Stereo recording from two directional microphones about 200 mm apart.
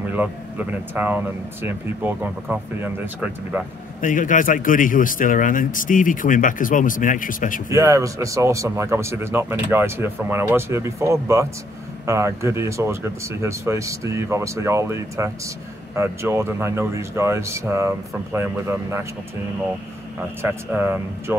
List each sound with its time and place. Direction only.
0.0 s speech: 10° right (ahead or behind)
4.0 s a man's voice: 40° left (ahead or behind)
7.7 s speech: 15° right (ahead or behind)
20.2 s speech: 10° right (ahead or behind)